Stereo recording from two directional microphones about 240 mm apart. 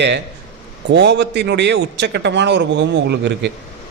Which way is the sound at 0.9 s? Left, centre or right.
Right.